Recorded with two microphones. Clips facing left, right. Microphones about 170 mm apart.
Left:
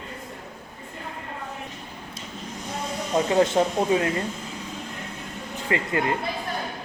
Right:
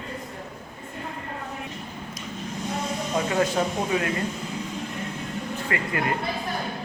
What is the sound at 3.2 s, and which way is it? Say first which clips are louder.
Speech: left 4 dB; 25° left (ahead or behind).